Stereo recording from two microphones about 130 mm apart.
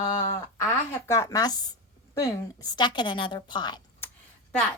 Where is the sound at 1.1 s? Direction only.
25° left (ahead or behind).